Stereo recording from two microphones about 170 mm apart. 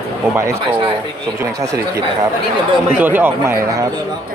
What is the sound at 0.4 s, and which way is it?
Speech, 15° right (ahead or behind).